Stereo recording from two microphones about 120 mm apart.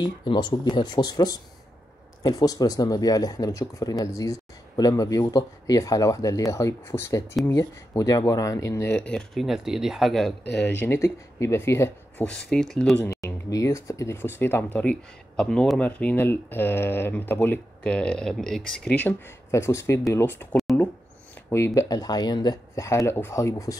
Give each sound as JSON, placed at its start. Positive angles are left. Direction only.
{"t": 0.0, "sound": "speech", "side_deg": 40}
{"t": 9.0, "sound": "speech", "side_deg": 5}
{"t": 10.8, "sound": "speech", "side_deg": 25}
{"t": 12.3, "sound": "speech", "side_deg": 5}
{"t": 13.0, "sound": "speech", "side_deg": 25}
{"t": 21.5, "sound": "speech", "side_deg": 25}